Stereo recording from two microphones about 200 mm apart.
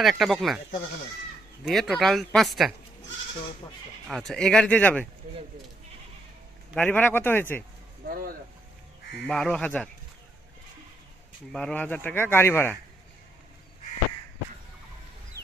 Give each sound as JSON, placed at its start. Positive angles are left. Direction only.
{"t": 0.0, "sound": "speech", "side_deg": 0}
{"t": 1.6, "sound": "speech", "side_deg": 0}
{"t": 4.1, "sound": "speech", "side_deg": 0}
{"t": 6.7, "sound": "speech", "side_deg": 10}
{"t": 8.0, "sound": "speech", "side_deg": -45}
{"t": 9.2, "sound": "speech", "side_deg": 5}
{"t": 11.5, "sound": "speech", "side_deg": 5}